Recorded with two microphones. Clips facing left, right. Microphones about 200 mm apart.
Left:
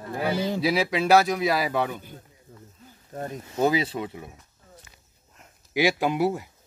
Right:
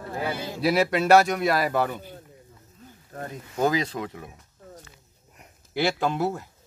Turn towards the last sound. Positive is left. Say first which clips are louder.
# left 2 dB
turn(degrees=10)  # may be behind; listen again after turning